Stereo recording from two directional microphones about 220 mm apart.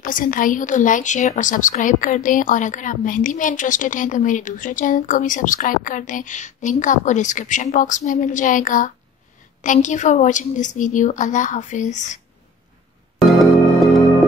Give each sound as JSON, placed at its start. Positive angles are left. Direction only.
{"t": 0.0, "sound": "a woman's voice", "side_deg": 40}